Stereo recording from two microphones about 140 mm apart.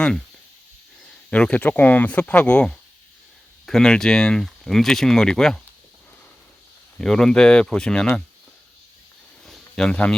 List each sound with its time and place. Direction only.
1.3 s speech: 10° left (ahead or behind)
7.0 s speech: 5° left (ahead or behind)
9.5 s a sound: 5° left (ahead or behind)